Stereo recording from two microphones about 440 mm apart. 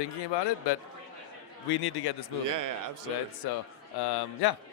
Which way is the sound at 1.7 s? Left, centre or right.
Left.